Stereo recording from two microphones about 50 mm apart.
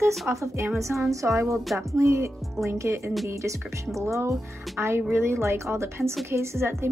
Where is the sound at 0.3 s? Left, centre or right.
Right.